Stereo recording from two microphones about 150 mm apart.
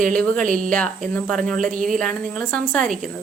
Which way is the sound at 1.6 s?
60° right (ahead or behind).